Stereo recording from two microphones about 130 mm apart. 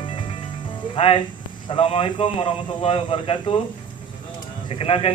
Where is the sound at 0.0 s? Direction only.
45° left (ahead or behind).